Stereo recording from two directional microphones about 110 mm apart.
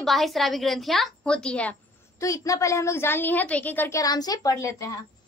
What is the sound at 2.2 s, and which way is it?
A woman's voice, 30° left (ahead or behind).